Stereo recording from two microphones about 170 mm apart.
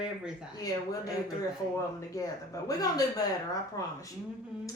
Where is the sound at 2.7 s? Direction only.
20° left (ahead or behind).